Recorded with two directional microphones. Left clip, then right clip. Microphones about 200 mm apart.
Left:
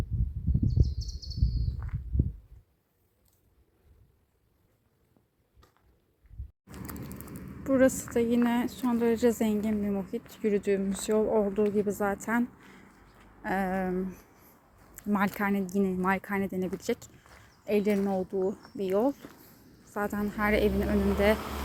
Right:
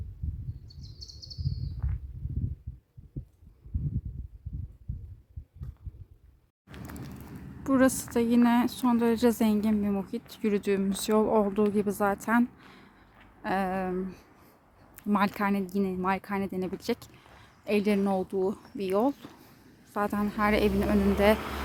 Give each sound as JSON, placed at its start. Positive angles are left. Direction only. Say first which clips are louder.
{"t": 7.6, "sound": "a woman's voice", "louder": "left 1 dB", "side_deg": -15}
{"t": 14.9, "sound": "a sound", "louder": "right 2 dB", "side_deg": -10}
{"t": 15.4, "sound": "a woman's voice", "louder": "even", "side_deg": -10}
{"t": 21.3, "sound": "speech", "louder": "right 2 dB", "side_deg": 0}